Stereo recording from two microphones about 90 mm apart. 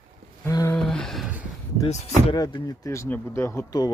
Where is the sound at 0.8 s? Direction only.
5° left (ahead or behind).